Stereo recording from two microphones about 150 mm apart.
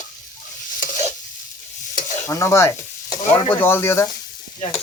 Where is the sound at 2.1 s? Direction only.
20° left (ahead or behind).